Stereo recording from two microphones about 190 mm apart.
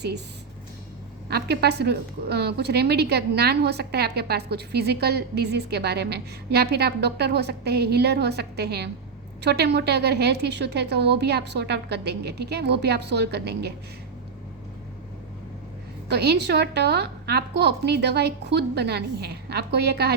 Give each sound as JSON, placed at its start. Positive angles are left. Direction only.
{"t": 1.3, "sound": "a woman's voice", "side_deg": -60}
{"t": 16.0, "sound": "a woman's voice", "side_deg": -60}